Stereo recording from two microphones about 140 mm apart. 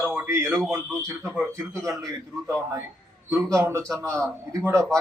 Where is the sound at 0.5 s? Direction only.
Centre (ahead or behind).